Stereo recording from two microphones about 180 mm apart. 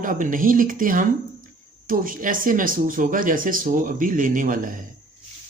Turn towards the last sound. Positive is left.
turn(degrees=-50)  # may be behind; listen again after turning